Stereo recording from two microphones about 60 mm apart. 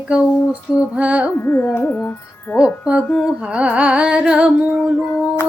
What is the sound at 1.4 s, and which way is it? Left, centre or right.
Speech, left.